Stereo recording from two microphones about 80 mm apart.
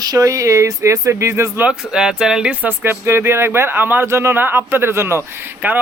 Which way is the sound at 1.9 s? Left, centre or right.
Centre.